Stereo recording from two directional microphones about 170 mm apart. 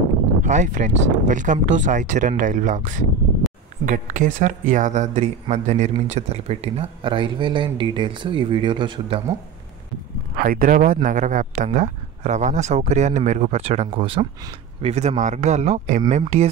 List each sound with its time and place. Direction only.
0.4 s speech: 45° right (ahead or behind)
3.4 s a sound: centre (ahead or behind)
3.8 s speech: 50° right (ahead or behind); by 9.2 s 30° right (ahead or behind)
10.3 s speech: 55° right (ahead or behind)